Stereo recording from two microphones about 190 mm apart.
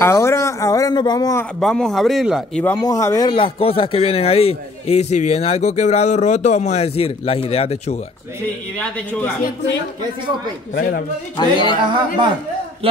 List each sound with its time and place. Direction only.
0.0 s speech: 15° left (ahead or behind)
1.6 s speech: centre (ahead or behind)
2.6 s speech: 15° left (ahead or behind); by 8.0 s 35° left (ahead or behind)
10.7 s speech: 45° left (ahead or behind)
11.3 s speech: 25° left (ahead or behind)